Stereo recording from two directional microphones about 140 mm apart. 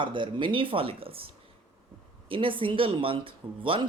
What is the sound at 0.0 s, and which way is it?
Speech, 35° right (ahead or behind).